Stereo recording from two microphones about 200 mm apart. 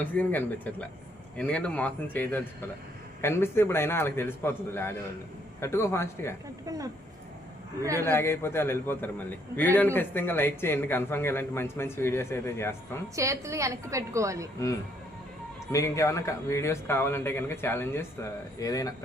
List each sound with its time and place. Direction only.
0.0 s a man's voice: 10° left (ahead or behind)
6.7 s a woman's voice: 15° right (ahead or behind)
8.0 s a man's voice: 10° left (ahead or behind)
13.1 s a woman's voice: 15° right (ahead or behind)
15.7 s a man's voice: 15° left (ahead or behind)